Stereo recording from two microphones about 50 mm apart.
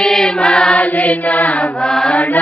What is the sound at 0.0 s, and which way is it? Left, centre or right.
Choir, centre.